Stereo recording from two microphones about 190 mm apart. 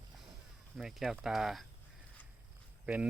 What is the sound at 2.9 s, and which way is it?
Speech, 5° right (ahead or behind).